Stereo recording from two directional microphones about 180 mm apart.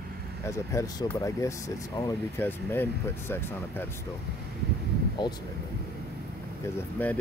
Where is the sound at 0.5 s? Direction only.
15° left (ahead or behind).